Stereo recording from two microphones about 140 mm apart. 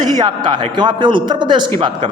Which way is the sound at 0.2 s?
30° right (ahead or behind).